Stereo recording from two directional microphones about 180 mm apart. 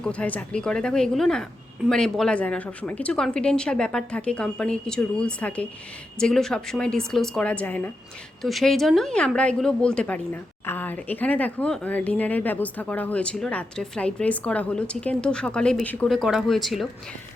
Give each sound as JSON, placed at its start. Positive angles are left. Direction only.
{"t": 0.0, "sound": "a woman's voice", "side_deg": 5}